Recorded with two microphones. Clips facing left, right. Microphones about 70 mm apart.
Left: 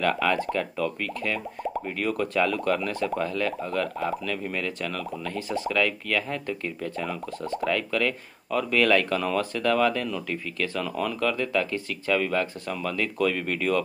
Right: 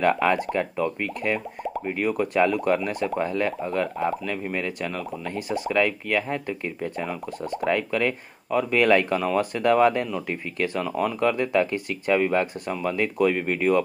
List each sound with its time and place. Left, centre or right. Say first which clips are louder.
0.0 s speech: right 3 dB; right